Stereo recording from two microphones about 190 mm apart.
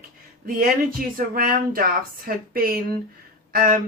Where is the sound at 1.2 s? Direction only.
50° right (ahead or behind).